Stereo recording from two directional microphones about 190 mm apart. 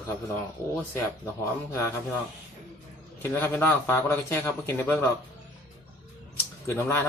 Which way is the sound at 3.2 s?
10° left (ahead or behind).